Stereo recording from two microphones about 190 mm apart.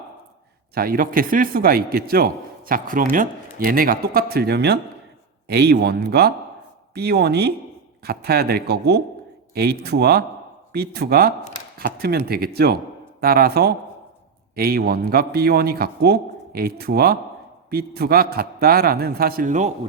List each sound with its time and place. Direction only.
0.7 s a man's voice: 50° right (ahead or behind)